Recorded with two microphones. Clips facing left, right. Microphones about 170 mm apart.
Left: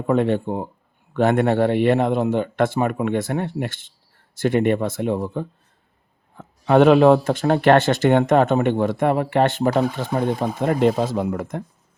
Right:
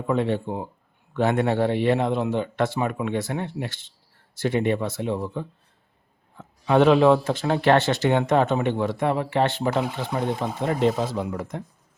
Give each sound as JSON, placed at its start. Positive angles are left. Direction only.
{"t": 0.1, "sound": "speech", "side_deg": 55}